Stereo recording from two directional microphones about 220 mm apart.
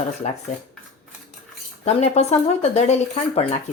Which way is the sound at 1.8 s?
30° left (ahead or behind).